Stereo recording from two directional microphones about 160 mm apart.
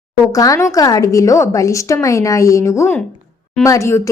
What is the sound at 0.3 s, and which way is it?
Speech, 20° left (ahead or behind).